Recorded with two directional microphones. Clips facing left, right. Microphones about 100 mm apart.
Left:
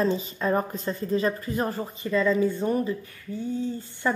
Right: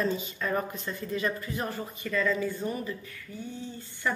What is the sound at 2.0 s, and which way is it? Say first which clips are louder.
Speech: left 6 dB; 25° left (ahead or behind).